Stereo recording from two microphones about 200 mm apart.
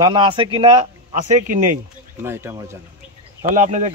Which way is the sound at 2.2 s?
10° right (ahead or behind).